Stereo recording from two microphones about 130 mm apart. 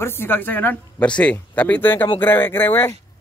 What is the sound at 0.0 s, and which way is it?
A man's voice, 15° left (ahead or behind).